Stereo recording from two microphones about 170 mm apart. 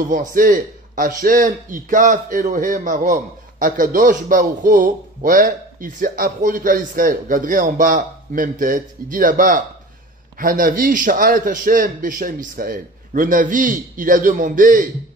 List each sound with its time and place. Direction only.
0.0 s a man's voice: 50° right (ahead or behind)